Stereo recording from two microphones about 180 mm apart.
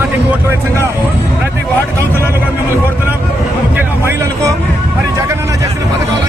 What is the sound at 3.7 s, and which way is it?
Vehicle, 15° right (ahead or behind).